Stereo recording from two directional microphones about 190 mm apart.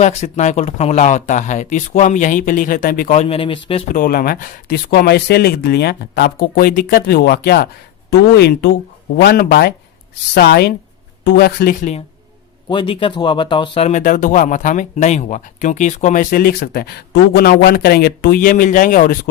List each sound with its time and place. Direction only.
0.0 s speech: 35° left (ahead or behind)
3.9 s speech: 45° left (ahead or behind)
12.6 s speech: 25° left (ahead or behind); by 19.3 s 50° left (ahead or behind)